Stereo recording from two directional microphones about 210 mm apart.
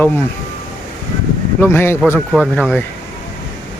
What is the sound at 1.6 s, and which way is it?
Speech, 10° left (ahead or behind).